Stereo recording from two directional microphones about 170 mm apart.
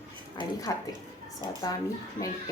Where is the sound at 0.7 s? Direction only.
20° left (ahead or behind).